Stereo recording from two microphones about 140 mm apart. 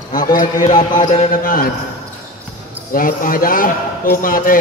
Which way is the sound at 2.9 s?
85° left.